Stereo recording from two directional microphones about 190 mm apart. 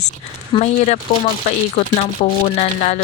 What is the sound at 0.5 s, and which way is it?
Speech, 35° left (ahead or behind).